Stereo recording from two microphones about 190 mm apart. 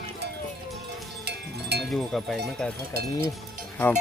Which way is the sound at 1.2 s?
60° right (ahead or behind).